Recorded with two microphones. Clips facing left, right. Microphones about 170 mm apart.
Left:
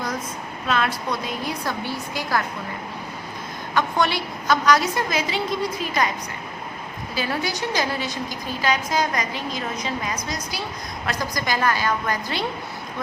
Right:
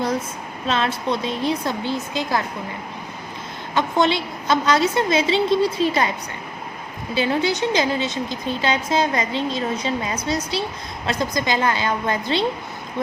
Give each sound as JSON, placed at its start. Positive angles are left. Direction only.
{"t": 0.7, "sound": "a woman's voice", "side_deg": -25}
{"t": 3.8, "sound": "a woman's voice", "side_deg": -20}
{"t": 7.2, "sound": "a woman's voice", "side_deg": -25}